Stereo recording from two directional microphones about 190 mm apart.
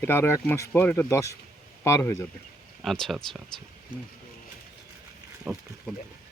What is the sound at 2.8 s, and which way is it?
Speech, centre (ahead or behind).